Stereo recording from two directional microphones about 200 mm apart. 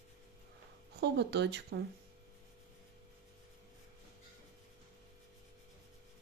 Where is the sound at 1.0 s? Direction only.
55° right (ahead or behind).